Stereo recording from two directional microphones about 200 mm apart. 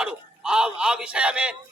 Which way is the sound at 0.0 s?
5° right (ahead or behind).